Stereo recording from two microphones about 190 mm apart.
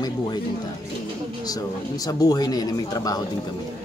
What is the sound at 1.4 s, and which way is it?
Speech, 20° left (ahead or behind).